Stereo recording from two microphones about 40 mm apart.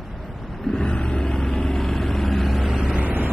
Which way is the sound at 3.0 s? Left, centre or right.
Right.